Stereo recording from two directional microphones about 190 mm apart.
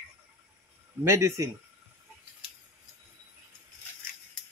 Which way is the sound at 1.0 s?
15° right (ahead or behind).